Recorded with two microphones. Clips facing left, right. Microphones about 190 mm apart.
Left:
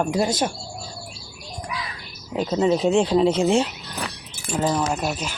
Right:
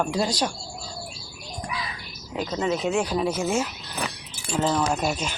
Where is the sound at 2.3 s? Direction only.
30° left (ahead or behind).